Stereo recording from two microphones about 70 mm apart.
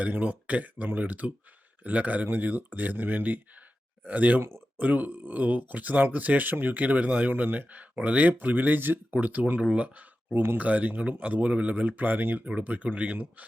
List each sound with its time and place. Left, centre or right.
0.0 s speech: right